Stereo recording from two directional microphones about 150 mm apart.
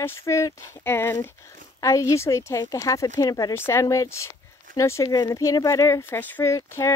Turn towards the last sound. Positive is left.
turn(degrees=20)  # may be behind; listen again after turning